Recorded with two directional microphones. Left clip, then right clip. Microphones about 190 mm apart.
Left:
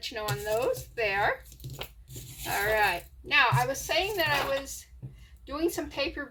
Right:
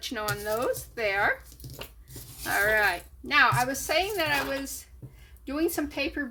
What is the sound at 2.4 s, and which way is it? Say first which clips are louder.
A woman's voice: right 2 dB; 40° right (ahead or behind).